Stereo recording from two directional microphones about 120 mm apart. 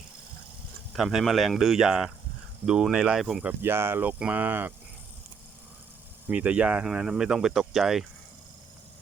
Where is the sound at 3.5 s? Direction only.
20° right (ahead or behind).